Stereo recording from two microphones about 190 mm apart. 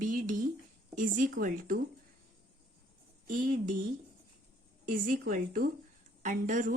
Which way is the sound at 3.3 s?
45° right (ahead or behind).